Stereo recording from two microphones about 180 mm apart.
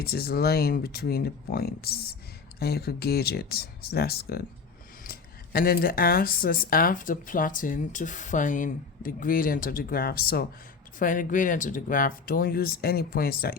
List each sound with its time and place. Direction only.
0.0 s speech: 60° left (ahead or behind)
11.0 s speech: 45° left (ahead or behind)